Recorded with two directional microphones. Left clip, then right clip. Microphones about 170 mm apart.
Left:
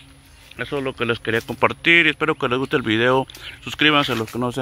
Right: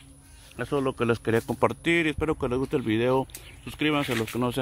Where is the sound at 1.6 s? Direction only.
15° right (ahead or behind).